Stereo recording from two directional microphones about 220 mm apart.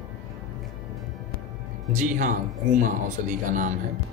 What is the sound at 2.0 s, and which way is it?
Speech, 35° right (ahead or behind).